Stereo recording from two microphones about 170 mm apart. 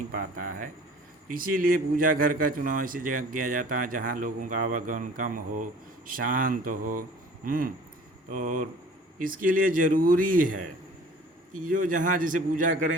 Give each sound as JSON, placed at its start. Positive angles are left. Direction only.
{"t": 0.1, "sound": "a man's voice", "side_deg": -55}
{"t": 7.4, "sound": "a sound", "side_deg": -55}
{"t": 8.3, "sound": "a man's voice", "side_deg": -50}